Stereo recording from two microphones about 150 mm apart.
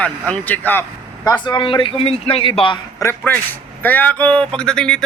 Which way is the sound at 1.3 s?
30° left (ahead or behind).